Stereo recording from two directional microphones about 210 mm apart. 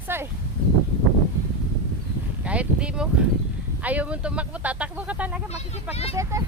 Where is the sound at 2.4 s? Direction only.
5° right (ahead or behind).